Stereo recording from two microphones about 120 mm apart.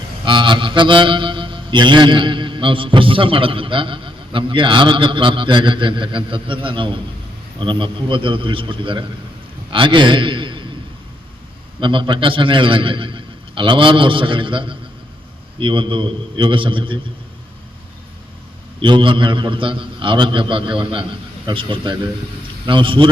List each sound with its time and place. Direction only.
0.3 s music: 40° right (ahead or behind)
9.6 s a man's voice: 45° right (ahead or behind)
11.8 s music: 45° right (ahead or behind)
18.8 s music: 45° right (ahead or behind)